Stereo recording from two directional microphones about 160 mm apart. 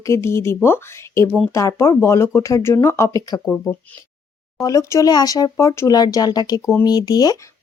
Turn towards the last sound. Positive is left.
turn(degrees=25)  # may be behind; listen again after turning